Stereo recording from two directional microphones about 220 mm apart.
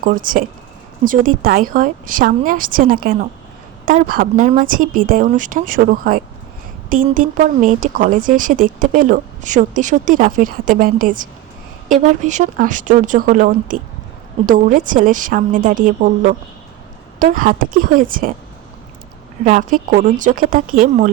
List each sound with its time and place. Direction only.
0.0 s speech: 40° right (ahead or behind)
19.5 s speech: 40° right (ahead or behind)